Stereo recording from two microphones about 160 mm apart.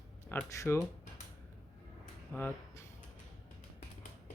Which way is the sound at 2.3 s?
10° left (ahead or behind).